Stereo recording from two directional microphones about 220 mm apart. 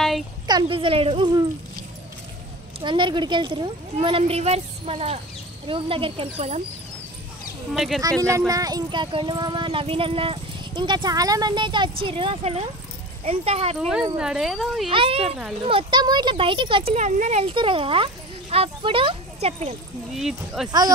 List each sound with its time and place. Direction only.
0.5 s speech: 20° right (ahead or behind)
2.8 s speech: 20° right (ahead or behind)
7.7 s speech: centre (ahead or behind)
8.2 s speech: 15° right (ahead or behind)
13.7 s speech: centre (ahead or behind)
14.9 s speech: 25° right (ahead or behind)
15.2 s speech: 5° right (ahead or behind)
15.6 s speech: 20° right (ahead or behind)
20.2 s speech: centre (ahead or behind)